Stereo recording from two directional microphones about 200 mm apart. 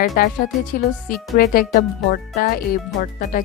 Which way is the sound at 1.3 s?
50° left (ahead or behind).